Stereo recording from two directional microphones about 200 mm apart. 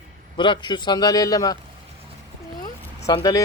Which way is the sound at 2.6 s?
20° left (ahead or behind).